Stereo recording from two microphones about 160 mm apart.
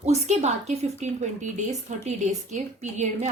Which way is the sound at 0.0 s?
45° right (ahead or behind).